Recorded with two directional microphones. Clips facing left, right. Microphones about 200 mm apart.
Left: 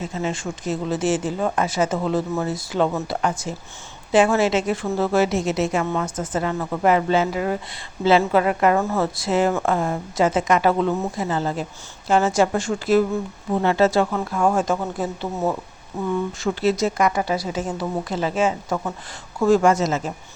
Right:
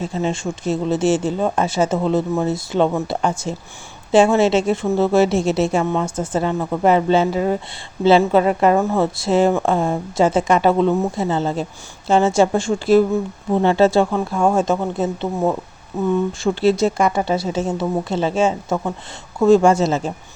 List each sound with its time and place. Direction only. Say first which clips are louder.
0.0 s speech: right 4 dB; 30° right (ahead or behind)